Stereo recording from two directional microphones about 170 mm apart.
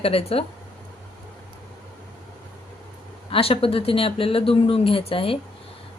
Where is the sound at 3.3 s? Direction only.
35° left (ahead or behind).